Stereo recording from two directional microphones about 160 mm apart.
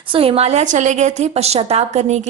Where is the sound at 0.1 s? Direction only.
35° right (ahead or behind).